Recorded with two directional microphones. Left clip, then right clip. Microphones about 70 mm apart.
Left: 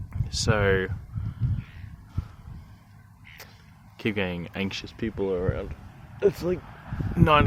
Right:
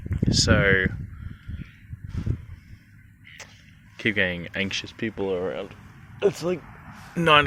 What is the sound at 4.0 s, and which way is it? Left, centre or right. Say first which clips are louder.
Speech: right 5 dB; left.